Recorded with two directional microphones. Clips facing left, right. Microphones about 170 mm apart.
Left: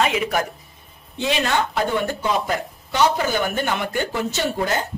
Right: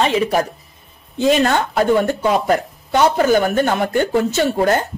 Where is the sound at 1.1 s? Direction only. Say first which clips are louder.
Right 7 dB; 45° right (ahead or behind).